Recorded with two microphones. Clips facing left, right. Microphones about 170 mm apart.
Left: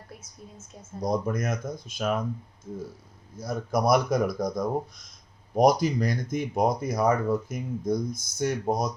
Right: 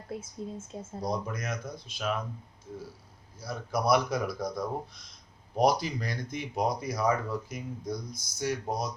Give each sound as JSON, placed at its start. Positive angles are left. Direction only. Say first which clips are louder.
{"t": 0.1, "sound": "speech", "louder": "right 13 dB", "side_deg": -25}
{"t": 1.0, "sound": "speech", "louder": "left 7 dB", "side_deg": 45}
{"t": 3.3, "sound": "speech", "louder": "left 5 dB", "side_deg": 50}